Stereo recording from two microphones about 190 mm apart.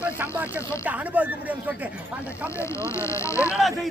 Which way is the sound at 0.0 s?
10° right (ahead or behind).